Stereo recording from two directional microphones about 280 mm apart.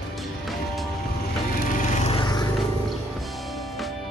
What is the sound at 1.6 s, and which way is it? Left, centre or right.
Vehicle, left.